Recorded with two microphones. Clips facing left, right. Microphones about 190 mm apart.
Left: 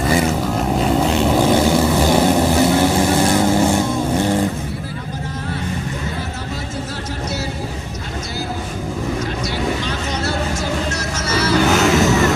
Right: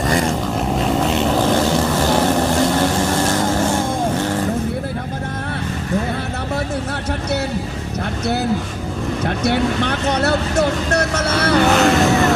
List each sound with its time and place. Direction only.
0.1 s vehicle: 5° left (ahead or behind)
1.3 s vehicle: 10° left (ahead or behind)
9.2 s vehicle: 60° right (ahead or behind)
11.7 s music: centre (ahead or behind)